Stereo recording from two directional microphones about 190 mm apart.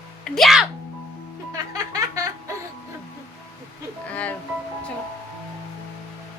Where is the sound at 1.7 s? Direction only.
20° right (ahead or behind).